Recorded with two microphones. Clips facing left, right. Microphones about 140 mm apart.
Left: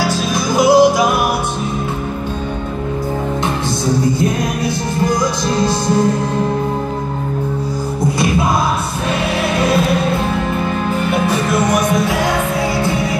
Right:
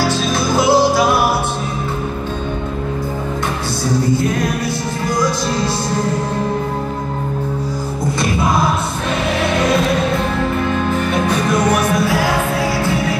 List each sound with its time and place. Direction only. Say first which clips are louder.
0.7 s music: left 4 dB; 15° left (ahead or behind)
11.1 s music: left 1 dB; 5° left (ahead or behind)